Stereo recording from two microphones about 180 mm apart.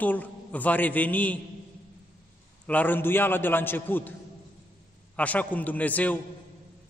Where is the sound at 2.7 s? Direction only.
10° left (ahead or behind).